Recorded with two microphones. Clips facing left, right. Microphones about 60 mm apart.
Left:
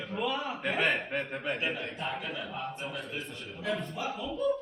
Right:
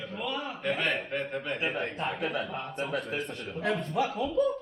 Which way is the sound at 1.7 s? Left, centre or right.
Right.